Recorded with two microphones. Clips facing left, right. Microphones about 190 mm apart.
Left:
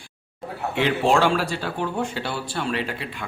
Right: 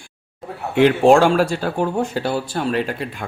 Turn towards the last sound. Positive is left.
turn(degrees=-45)  # may be behind; listen again after turning